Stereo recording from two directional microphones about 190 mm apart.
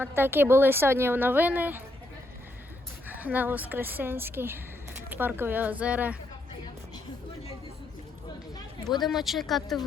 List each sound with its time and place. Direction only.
0.0 s a woman's voice: 10° right (ahead or behind)
3.1 s a woman's voice: 10° right (ahead or behind)
8.5 s a sound: 20° left (ahead or behind)
9.0 s speech: centre (ahead or behind)